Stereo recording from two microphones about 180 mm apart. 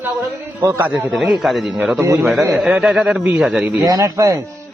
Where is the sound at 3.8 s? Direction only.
20° right (ahead or behind).